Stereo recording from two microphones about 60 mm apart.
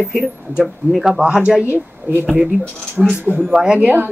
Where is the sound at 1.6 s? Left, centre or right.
Right.